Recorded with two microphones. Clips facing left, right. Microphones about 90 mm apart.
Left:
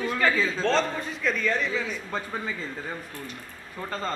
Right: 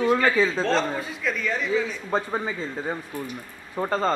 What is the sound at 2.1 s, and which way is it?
Speech, 30° right (ahead or behind).